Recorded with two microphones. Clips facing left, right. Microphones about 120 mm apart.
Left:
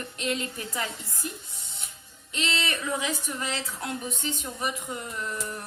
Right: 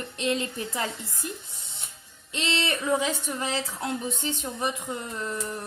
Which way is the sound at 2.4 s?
30° right (ahead or behind).